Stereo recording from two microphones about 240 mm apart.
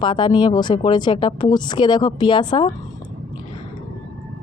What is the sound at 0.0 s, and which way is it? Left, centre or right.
Speech, centre.